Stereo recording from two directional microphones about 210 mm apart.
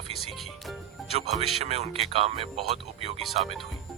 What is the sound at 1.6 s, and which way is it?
Speech, 30° right (ahead or behind).